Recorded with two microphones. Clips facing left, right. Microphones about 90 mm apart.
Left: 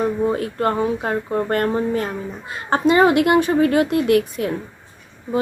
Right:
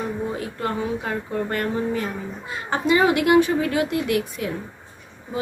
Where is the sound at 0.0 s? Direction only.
50° left (ahead or behind).